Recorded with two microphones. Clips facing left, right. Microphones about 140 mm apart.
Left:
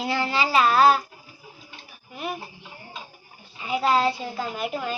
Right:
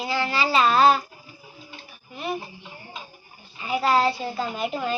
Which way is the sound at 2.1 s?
10° left (ahead or behind).